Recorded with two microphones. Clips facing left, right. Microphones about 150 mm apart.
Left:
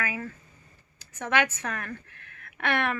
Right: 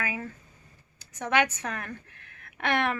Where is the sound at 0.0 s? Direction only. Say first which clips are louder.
Left 1 dB; 20° right (ahead or behind).